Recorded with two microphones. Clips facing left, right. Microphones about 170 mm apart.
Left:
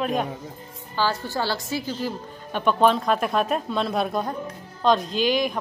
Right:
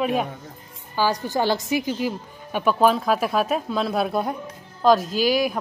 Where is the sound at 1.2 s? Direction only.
15° right (ahead or behind).